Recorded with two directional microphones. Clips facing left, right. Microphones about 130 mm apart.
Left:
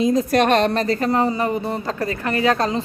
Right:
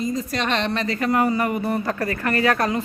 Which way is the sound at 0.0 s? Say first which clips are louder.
Left 8 dB; 65° left (ahead or behind).